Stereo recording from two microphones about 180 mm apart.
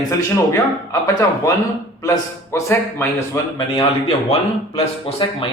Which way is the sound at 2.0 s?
15° left (ahead or behind).